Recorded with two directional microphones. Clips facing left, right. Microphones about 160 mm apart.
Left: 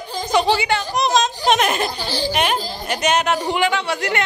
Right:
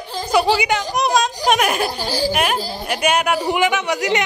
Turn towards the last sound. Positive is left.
turn(degrees=-15)  # may be behind; listen again after turning